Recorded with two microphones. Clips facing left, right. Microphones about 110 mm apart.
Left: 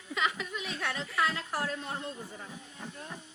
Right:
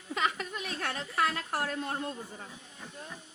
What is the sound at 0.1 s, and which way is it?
Chuckle, 45° right (ahead or behind).